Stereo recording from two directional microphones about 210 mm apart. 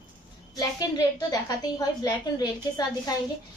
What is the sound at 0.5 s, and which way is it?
A woman's voice, 20° left (ahead or behind).